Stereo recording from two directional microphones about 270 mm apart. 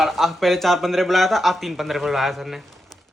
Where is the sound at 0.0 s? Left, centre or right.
Centre.